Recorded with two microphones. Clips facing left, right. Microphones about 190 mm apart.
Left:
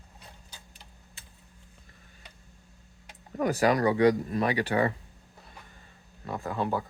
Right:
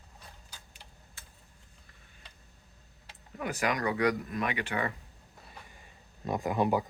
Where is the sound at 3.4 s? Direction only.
35° left (ahead or behind).